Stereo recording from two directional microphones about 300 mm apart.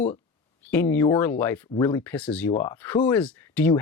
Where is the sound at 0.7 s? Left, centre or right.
Centre.